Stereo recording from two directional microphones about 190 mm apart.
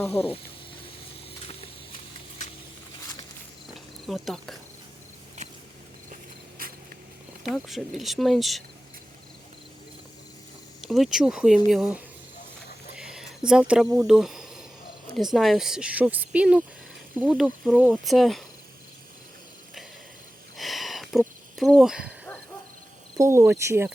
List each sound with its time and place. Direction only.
2.4 s a sound: 40° left (ahead or behind)
4.0 s speech: centre (ahead or behind)
6.6 s mouse: 50° right (ahead or behind)
7.4 s speech: centre (ahead or behind)
10.8 s speech: centre (ahead or behind)
13.0 s a sound: 5° right (ahead or behind)
13.5 s speech: 5° right (ahead or behind)
20.6 s a sound: centre (ahead or behind)
23.1 s speech: 15° right (ahead or behind)